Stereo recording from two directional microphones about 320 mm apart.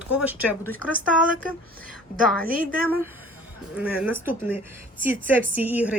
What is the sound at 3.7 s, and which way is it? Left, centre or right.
A woman's voice, centre.